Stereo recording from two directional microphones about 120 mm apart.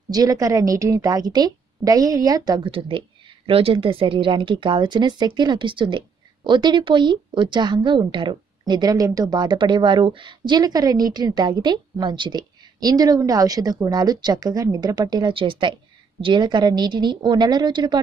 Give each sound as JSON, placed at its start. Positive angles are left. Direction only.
{"t": 0.1, "sound": "speech", "side_deg": -30}
{"t": 3.4, "sound": "speech", "side_deg": -50}